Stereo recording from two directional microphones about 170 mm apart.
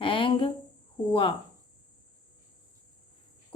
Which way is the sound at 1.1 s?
30° left (ahead or behind).